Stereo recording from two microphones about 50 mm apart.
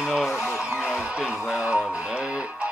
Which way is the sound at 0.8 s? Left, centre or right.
Centre.